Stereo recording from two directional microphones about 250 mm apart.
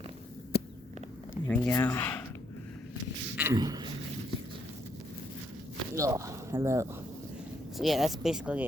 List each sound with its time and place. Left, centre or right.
0.5 s a sound: left
1.5 s speech: centre
3.3 s a man's voice: centre
6.0 s speech: centre
7.8 s speech: centre